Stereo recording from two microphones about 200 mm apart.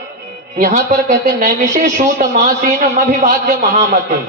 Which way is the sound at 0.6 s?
40° right (ahead or behind).